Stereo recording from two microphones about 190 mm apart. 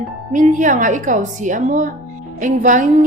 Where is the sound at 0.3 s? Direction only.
40° right (ahead or behind).